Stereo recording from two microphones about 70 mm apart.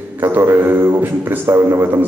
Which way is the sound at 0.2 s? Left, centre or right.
Right.